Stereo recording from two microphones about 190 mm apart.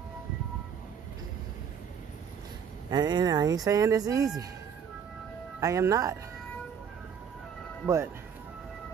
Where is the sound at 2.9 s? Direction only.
20° right (ahead or behind).